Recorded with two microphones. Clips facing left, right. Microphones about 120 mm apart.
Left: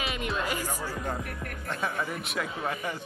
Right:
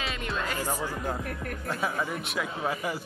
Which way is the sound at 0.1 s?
10° left (ahead or behind).